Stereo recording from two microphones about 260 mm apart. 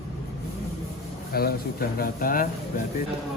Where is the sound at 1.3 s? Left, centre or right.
Left.